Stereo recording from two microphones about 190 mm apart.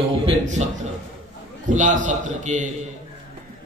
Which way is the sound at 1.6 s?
40° right (ahead or behind).